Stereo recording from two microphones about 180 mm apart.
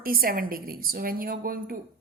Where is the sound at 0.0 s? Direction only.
55° right (ahead or behind).